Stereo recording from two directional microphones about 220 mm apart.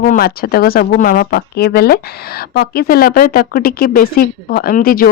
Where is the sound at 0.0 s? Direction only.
45° left (ahead or behind).